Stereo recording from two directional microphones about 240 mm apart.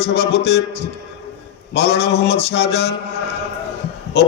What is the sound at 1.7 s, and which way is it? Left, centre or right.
A man's voice, left.